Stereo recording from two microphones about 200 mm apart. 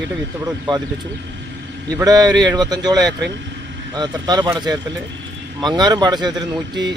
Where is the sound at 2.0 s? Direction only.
20° right (ahead or behind).